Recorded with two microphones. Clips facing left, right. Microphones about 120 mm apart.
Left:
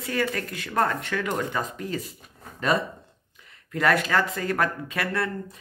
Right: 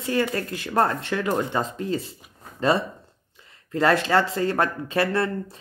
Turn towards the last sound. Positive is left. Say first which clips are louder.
# right 5 dB
turn(degrees=-30)  # may be behind; listen again after turning